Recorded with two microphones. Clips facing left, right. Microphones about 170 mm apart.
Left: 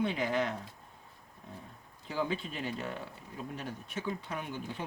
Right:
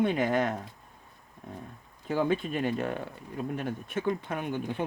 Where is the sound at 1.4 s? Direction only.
55° right (ahead or behind).